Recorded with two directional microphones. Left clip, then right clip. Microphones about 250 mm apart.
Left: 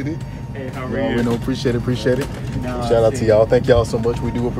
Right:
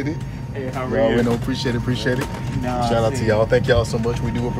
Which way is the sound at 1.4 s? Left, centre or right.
Left.